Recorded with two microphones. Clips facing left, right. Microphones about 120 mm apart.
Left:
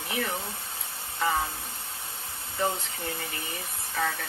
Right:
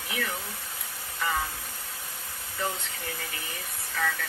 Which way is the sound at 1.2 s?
25° left (ahead or behind).